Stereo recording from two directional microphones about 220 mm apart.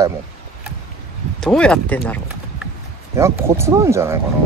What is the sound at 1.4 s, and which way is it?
Speech, 5° left (ahead or behind).